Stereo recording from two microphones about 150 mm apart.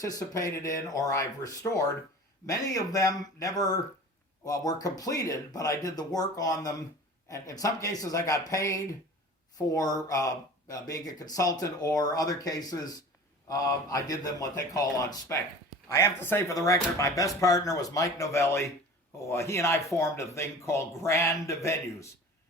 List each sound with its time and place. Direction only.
0.0 s speech: 25° left (ahead or behind)